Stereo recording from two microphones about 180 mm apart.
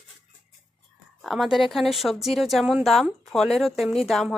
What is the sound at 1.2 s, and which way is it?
Speech, centre (ahead or behind).